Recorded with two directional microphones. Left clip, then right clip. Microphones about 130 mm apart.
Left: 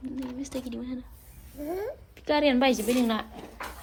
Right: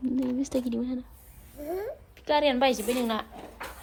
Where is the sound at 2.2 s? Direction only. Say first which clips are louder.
Even; 15° right (ahead or behind).